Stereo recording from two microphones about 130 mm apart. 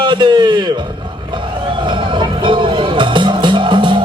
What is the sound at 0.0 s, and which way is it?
Speech, 35° right (ahead or behind).